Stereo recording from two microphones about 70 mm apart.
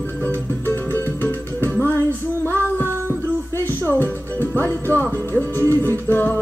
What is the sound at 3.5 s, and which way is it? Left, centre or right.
Music, left.